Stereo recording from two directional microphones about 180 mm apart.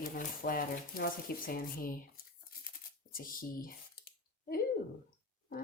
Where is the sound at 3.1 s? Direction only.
50° left (ahead or behind).